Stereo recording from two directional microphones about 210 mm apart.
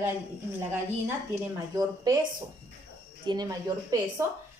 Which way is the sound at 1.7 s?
15° right (ahead or behind).